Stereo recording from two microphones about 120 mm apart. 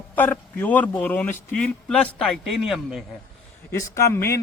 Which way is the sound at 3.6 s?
25° left (ahead or behind).